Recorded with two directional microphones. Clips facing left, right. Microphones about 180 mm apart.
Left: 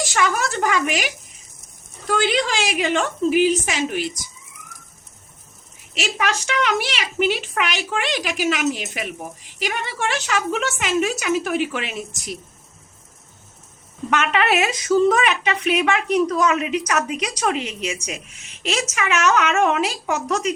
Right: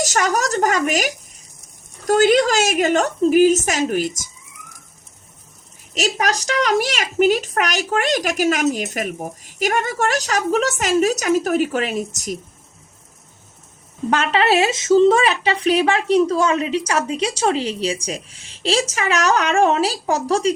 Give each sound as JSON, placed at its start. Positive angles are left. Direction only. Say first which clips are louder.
{"t": 0.0, "sound": "a woman's voice", "louder": "right 2 dB", "side_deg": -40}
{"t": 5.9, "sound": "a woman's voice", "louder": "right 3 dB", "side_deg": -40}
{"t": 14.1, "sound": "a woman's voice", "louder": "right 3 dB", "side_deg": -30}